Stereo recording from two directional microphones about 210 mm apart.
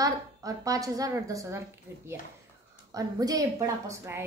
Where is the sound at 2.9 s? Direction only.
15° right (ahead or behind).